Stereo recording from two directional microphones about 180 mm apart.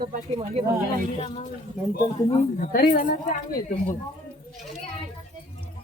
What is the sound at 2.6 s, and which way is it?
A woman's voice, 50° left (ahead or behind).